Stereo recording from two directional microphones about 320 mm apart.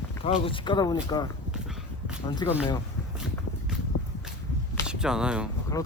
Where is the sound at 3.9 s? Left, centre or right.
Left.